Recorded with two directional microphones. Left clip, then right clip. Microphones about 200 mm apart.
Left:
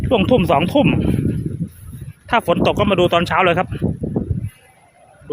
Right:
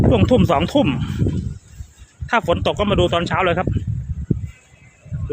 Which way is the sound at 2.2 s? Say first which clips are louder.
Left 2 dB; 20° left (ahead or behind).